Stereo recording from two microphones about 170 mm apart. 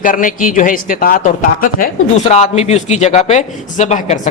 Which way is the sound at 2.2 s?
40° left (ahead or behind).